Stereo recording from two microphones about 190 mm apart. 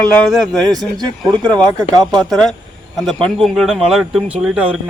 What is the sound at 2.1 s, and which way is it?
A man's voice, 5° left (ahead or behind).